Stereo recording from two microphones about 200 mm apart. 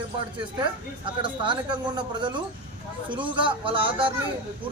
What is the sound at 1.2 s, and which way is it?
Speech, 25° right (ahead or behind).